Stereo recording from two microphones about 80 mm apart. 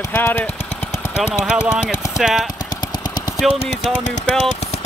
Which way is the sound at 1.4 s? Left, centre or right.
Centre.